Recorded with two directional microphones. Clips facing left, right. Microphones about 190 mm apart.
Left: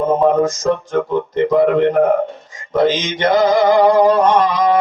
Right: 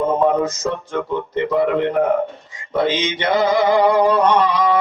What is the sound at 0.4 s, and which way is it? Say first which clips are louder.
Speech: left 3 dB; 45° left (ahead or behind).